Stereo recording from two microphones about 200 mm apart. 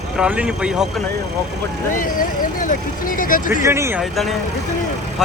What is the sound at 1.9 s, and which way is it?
Speech, 40° left (ahead or behind).